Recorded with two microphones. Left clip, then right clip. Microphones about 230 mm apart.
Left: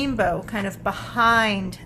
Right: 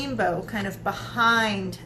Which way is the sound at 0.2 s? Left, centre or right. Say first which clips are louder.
Even; left.